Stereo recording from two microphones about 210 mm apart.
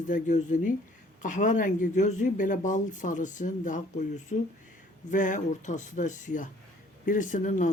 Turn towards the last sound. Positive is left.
turn(degrees=35)  # may be behind; listen again after turning